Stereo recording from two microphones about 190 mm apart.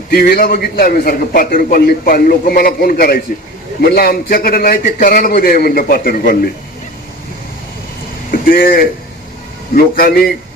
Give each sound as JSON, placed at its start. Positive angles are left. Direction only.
{"t": 0.1, "sound": "a man's voice", "side_deg": 50}
{"t": 8.3, "sound": "a man's voice", "side_deg": 50}